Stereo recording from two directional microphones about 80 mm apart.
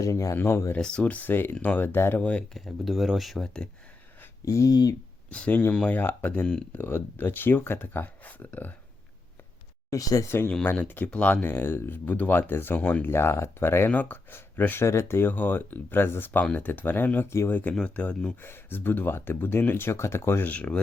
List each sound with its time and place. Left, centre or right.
0.0 s speech: left
0.8 s speech: centre; by 2.2 s left
2.5 s speech: centre
4.4 s speech: left
5.7 s speech: centre
6.7 s speech: left
9.9 s speech: left
10.2 s speech: left
10.5 s speech: centre
18.3 s speech: left
20.5 s speech: centre